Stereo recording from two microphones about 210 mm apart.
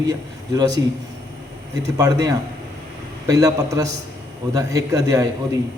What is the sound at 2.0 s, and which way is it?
A man's voice, 15° right (ahead or behind).